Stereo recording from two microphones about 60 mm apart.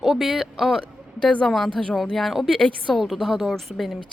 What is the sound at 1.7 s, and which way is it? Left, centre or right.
Speech, centre.